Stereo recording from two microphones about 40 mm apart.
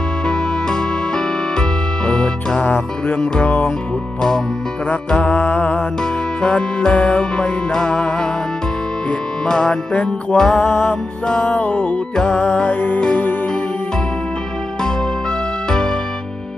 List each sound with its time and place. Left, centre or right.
0.3 s music: centre
2.6 s music: left
4.9 s music: left
6.0 s music: left
10.3 s music: centre
11.4 s music: left
12.1 s music: centre
12.6 s music: left
15.7 s music: centre